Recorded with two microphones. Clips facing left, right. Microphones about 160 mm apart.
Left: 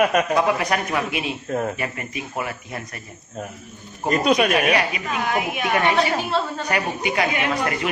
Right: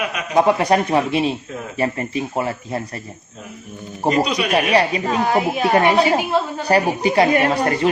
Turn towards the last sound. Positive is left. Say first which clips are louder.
# right 6 dB
turn(degrees=-30)  # may be behind; listen again after turning